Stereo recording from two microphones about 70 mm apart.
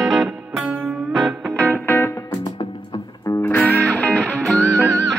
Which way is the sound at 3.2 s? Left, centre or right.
Left.